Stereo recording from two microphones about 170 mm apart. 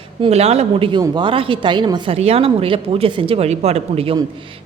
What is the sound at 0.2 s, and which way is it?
A man's voice, 40° right (ahead or behind).